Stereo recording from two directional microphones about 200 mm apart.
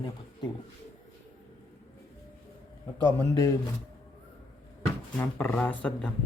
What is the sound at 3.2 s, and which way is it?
Speech, 15° left (ahead or behind).